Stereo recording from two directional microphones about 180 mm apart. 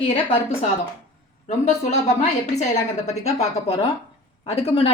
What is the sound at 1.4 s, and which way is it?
Speech, 40° left (ahead or behind).